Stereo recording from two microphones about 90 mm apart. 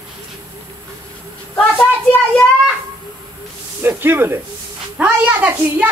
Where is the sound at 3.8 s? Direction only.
25° right (ahead or behind).